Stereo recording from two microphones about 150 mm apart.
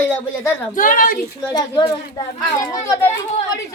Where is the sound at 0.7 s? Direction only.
65° left (ahead or behind).